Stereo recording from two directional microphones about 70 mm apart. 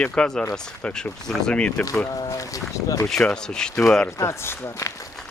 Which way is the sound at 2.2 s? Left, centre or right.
Left.